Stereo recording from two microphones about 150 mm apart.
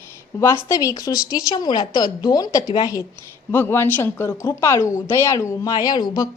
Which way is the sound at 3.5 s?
15° left (ahead or behind).